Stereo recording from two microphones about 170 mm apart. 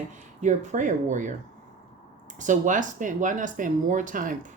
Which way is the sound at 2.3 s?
50° right (ahead or behind).